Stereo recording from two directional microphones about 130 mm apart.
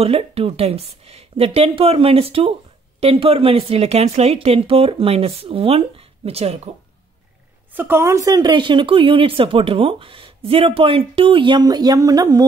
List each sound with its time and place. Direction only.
0.0 s a woman's voice: 50° right (ahead or behind)
7.7 s speech: 15° right (ahead or behind)